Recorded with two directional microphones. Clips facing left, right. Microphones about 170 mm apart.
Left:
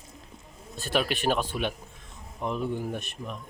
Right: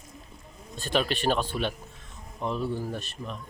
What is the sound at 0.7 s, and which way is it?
Speech, 10° left (ahead or behind).